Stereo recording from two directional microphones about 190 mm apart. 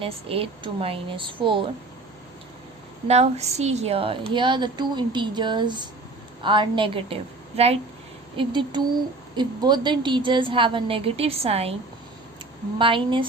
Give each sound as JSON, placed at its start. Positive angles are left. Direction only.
{"t": 0.0, "sound": "a woman's voice", "side_deg": -30}
{"t": 3.1, "sound": "a woman's voice", "side_deg": -35}
{"t": 12.8, "sound": "a woman's voice", "side_deg": -25}